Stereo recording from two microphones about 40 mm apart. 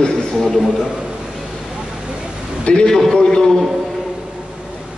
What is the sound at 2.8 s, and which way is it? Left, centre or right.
Speech, centre.